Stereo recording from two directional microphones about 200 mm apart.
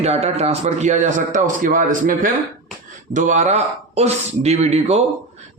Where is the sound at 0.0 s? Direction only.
30° right (ahead or behind).